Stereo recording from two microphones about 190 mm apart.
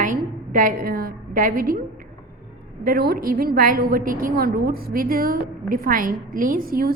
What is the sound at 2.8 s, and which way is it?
A woman's voice, 50° right (ahead or behind).